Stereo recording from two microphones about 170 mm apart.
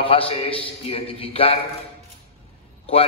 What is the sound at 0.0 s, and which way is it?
A man's voice, 35° left (ahead or behind).